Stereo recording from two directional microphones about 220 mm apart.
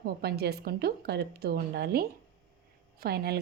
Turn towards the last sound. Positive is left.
turn(degrees=-45)  # may be behind; listen again after turning